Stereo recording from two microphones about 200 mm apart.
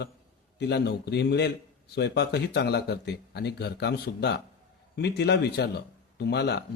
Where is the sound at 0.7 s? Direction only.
55° left (ahead or behind).